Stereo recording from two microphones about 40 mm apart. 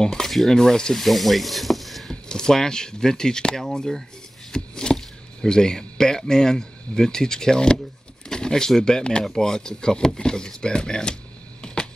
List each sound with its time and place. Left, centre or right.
0.0 s speech: centre
0.9 s speech: centre
2.2 s speech: centre
4.5 s a sound: centre
4.9 s speech: centre
11.6 s a sound: left